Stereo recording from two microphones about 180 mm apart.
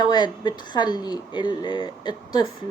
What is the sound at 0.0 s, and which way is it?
Speech, 25° left (ahead or behind).